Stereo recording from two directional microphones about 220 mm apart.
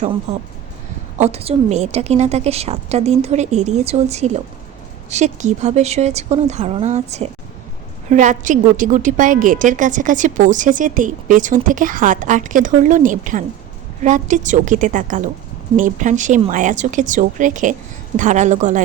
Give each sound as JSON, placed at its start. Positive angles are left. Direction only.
{"t": 0.3, "sound": "a woman's voice", "side_deg": -30}